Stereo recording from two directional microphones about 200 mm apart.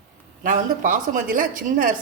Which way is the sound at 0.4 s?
40° right (ahead or behind).